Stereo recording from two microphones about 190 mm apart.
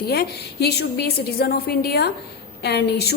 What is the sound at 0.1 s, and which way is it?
A woman's voice, 55° left (ahead or behind).